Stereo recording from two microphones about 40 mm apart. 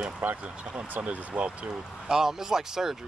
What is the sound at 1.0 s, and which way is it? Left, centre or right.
Speech, right.